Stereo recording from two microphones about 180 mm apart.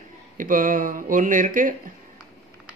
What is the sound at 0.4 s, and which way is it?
Speech, 50° right (ahead or behind).